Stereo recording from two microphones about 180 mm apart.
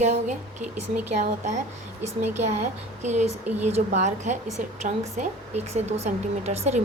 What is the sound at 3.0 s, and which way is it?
Speech, 40° right (ahead or behind).